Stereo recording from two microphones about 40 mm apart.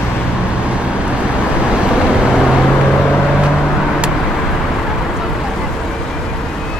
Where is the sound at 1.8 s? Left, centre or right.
Right.